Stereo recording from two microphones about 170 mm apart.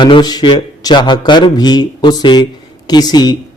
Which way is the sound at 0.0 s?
25° left (ahead or behind).